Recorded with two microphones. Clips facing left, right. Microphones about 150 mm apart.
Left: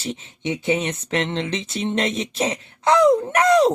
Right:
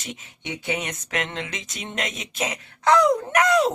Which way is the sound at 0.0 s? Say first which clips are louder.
Left 8 dB; 30° left (ahead or behind).